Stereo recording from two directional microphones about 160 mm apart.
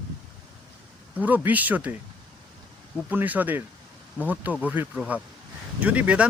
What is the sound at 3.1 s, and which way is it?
Speech, 10° right (ahead or behind).